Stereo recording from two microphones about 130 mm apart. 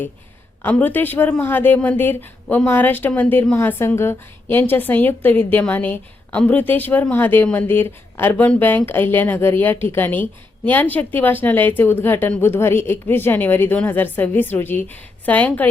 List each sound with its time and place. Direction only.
0.6 s a woman's voice: 15° left (ahead or behind)